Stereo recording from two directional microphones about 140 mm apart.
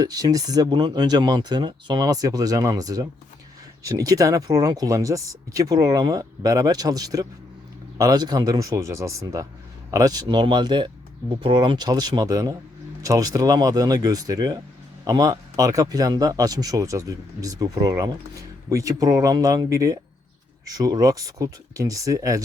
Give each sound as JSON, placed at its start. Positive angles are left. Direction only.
{"t": 0.0, "sound": "speech", "side_deg": -25}